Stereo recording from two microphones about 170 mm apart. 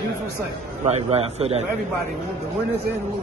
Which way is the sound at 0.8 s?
40° right (ahead or behind).